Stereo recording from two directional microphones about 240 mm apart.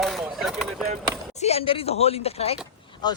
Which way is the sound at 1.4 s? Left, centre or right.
Left.